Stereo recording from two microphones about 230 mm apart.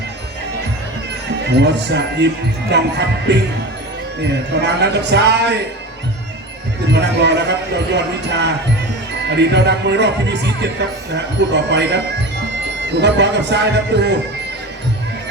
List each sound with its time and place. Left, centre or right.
1.5 s speech: right
6.9 s speech: right
13.0 s speech: right